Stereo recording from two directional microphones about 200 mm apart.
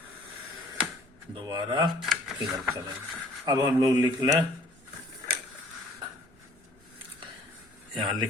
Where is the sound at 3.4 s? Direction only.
20° right (ahead or behind).